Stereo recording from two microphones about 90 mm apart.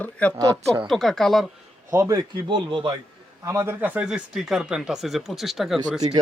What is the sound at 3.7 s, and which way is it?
Speech, 20° right (ahead or behind).